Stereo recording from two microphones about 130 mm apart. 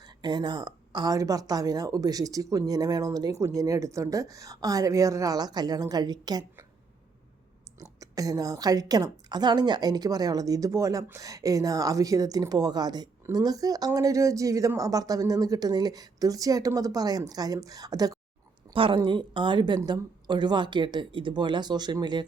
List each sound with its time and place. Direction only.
0.2 s a woman's voice: 35° right (ahead or behind)
7.8 s a woman's voice: 25° right (ahead or behind)
18.7 s a woman's voice: 40° right (ahead or behind)